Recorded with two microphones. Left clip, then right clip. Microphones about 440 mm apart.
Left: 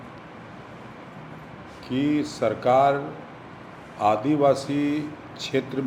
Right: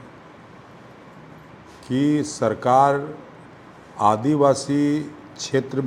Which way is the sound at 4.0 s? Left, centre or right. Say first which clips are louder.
Right 3 dB; right.